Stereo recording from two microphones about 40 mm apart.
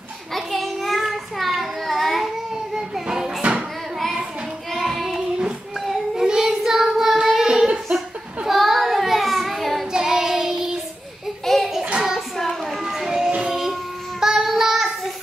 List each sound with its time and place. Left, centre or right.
0.3 s child singing: centre
2.5 s a sound: centre
4.7 s child singing: centre
6.1 s child singing: centre
8.5 s child singing: centre
9.9 s child singing: centre
11.4 s a sound: centre
12.8 s a sound: centre
13.5 s music: centre
14.2 s child singing: centre